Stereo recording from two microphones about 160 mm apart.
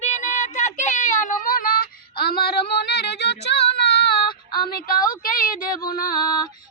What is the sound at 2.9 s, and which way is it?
Music, 90° left.